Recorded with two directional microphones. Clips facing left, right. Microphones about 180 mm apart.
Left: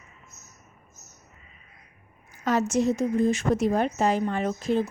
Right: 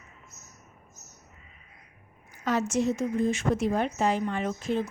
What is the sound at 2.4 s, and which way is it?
A woman's voice, 40° left (ahead or behind).